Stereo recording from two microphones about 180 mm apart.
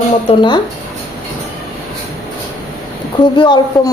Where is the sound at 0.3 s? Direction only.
25° left (ahead or behind).